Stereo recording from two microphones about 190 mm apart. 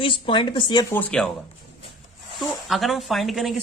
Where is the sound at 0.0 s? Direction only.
25° left (ahead or behind); by 1.3 s 5° left (ahead or behind).